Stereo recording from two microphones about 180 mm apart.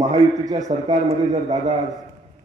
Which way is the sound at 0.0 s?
35° right (ahead or behind).